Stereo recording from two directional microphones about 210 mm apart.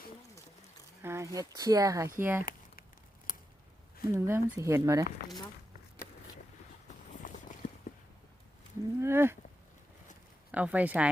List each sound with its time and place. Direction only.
1.0 s speech: 15° right (ahead or behind)
2.4 s a sound: 45° left (ahead or behind)
3.3 s scissors: 40° left (ahead or behind)
4.1 s speech: 10° right (ahead or behind)
6.8 s vehicle: 35° left (ahead or behind)
9.0 s speech: 10° right (ahead or behind)
10.5 s speech: 5° right (ahead or behind)